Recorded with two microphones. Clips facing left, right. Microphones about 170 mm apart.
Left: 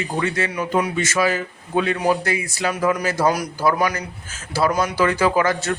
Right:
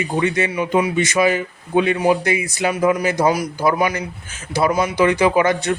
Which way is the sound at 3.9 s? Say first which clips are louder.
Right 3 dB; 40° left (ahead or behind).